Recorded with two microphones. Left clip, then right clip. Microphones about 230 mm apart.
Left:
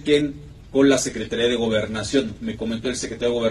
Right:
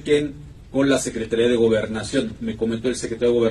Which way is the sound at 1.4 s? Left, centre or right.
Left.